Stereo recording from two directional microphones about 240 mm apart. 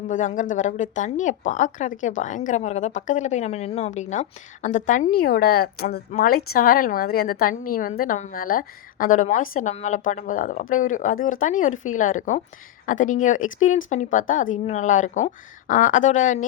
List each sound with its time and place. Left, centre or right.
0.1 s speech: left